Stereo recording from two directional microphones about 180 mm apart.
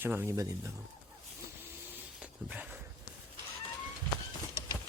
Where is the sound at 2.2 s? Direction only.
10° right (ahead or behind).